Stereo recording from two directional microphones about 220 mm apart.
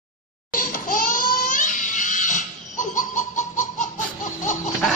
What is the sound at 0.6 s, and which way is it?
Crying, 40° left (ahead or behind).